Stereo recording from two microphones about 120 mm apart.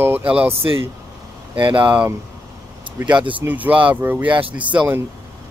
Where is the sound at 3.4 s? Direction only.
15° right (ahead or behind).